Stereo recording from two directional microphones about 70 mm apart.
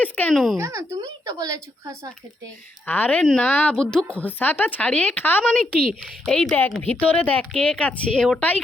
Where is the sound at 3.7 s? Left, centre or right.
Centre.